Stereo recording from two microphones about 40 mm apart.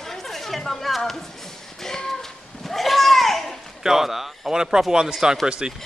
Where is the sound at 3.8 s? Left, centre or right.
Centre.